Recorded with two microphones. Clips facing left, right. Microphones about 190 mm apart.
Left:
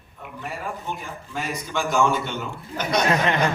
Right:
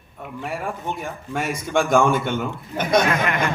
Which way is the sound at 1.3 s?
60° right (ahead or behind).